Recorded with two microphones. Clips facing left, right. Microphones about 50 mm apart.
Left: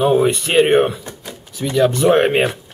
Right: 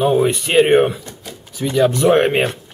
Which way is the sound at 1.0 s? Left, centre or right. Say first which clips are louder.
Left 2 dB; left.